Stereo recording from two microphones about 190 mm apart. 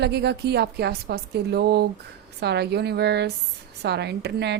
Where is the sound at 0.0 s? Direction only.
60° right (ahead or behind).